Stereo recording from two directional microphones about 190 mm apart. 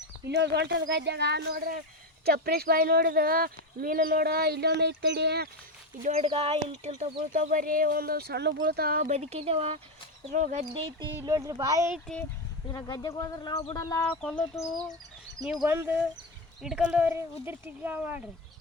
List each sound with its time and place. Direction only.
0.3 s speech: 65° right (ahead or behind)
6.0 s speech: 35° right (ahead or behind)
9.1 s speech: 35° right (ahead or behind)
11.2 s speech: 15° right (ahead or behind)
12.7 s speech: 20° left (ahead or behind)
14.0 s speech: 5° left (ahead or behind)
15.4 s speech: 10° right (ahead or behind)